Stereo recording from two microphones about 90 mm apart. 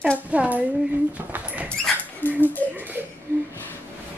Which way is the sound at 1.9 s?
5° left (ahead or behind).